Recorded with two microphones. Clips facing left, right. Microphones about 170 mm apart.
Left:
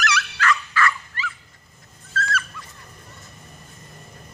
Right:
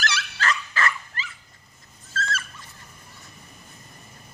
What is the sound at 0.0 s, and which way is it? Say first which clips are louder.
Dog: left 4 dB; 30° right (ahead or behind).